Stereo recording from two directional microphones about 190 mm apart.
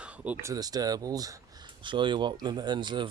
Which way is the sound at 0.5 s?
20° right (ahead or behind).